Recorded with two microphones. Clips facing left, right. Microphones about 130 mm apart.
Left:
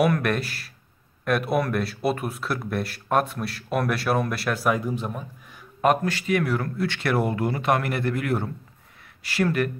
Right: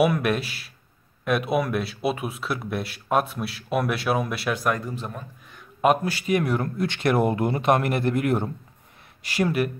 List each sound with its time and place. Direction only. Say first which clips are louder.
0.0 s speech: right 1 dB; 5° right (ahead or behind)
5.8 s speech: right 1 dB; 10° right (ahead or behind)